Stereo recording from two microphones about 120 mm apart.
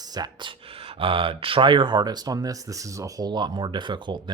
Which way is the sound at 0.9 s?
50° right (ahead or behind).